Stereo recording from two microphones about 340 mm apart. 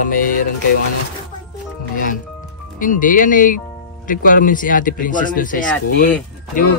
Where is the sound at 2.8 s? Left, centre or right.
Left.